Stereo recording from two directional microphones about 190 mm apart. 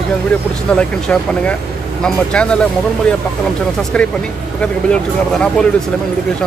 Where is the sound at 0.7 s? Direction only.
5° left (ahead or behind).